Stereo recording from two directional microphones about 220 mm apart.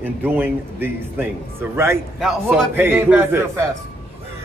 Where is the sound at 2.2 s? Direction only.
Centre (ahead or behind).